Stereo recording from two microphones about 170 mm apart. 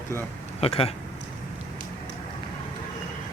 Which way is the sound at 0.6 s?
35° left (ahead or behind).